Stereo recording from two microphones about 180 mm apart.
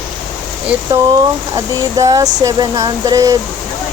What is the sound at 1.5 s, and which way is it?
Speech, 20° right (ahead or behind).